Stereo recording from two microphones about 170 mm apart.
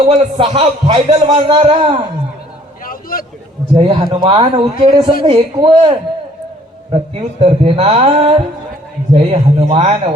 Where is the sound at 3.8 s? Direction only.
35° right (ahead or behind).